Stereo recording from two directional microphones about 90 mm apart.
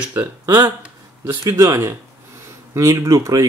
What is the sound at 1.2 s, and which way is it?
Speech, 35° right (ahead or behind).